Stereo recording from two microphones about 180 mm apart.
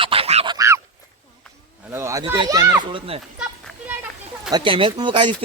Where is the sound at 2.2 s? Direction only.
25° right (ahead or behind).